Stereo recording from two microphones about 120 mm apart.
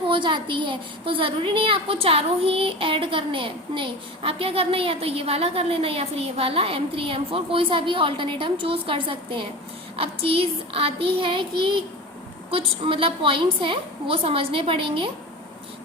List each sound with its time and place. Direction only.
0.1 s a woman's voice: 40° right (ahead or behind)